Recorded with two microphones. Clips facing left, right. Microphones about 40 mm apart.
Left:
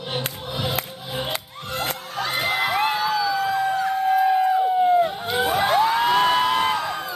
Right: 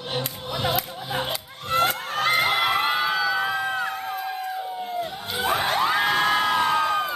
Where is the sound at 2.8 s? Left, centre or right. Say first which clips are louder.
Left 1 dB; right.